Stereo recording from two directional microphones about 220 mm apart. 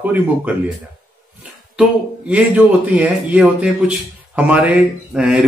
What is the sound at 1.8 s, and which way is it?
Speech, 5° right (ahead or behind).